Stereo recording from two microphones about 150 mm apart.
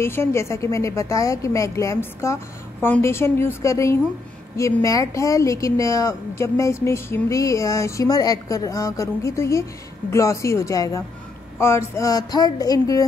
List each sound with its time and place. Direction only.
0.0 s a woman's voice: 15° left (ahead or behind)